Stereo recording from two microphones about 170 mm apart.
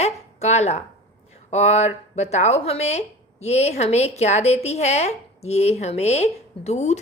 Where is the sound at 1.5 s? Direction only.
40° left (ahead or behind).